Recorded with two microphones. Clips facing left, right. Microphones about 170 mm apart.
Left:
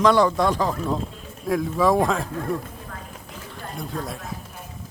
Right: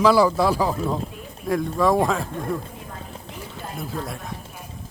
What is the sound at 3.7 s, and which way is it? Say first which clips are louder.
Speech: even; centre (ahead or behind).